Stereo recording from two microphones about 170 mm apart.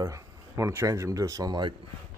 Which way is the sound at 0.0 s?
20° right (ahead or behind).